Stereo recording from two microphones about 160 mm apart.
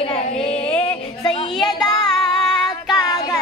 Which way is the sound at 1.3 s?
30° left (ahead or behind).